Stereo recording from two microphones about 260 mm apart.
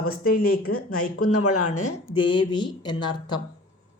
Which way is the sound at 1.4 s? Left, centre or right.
Left.